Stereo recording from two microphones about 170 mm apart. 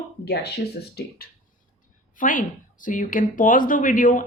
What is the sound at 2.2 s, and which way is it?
Speech, 50° left (ahead or behind).